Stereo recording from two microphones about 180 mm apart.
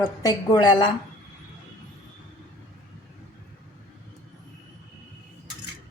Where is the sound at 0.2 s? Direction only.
20° left (ahead or behind).